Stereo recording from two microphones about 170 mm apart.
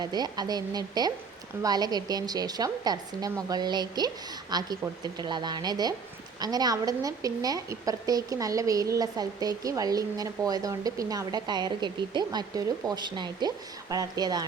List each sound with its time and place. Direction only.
0.0 s a woman's voice: 25° right (ahead or behind)